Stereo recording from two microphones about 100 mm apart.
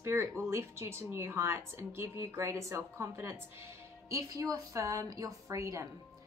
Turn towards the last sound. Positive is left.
turn(degrees=-30)  # may be behind; listen again after turning